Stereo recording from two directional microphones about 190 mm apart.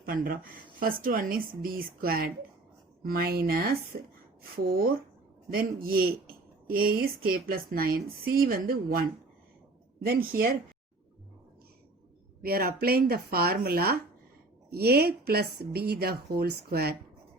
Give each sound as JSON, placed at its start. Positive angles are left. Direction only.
{"t": 0.0, "sound": "speech", "side_deg": -50}
{"t": 10.1, "sound": "speech", "side_deg": -50}
{"t": 12.4, "sound": "a woman's voice", "side_deg": -55}